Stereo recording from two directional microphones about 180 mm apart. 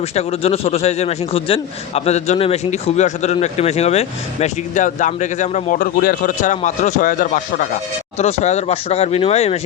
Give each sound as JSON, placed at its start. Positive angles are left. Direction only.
{"t": 0.2, "sound": "speech", "side_deg": 35}
{"t": 8.2, "sound": "speech", "side_deg": 35}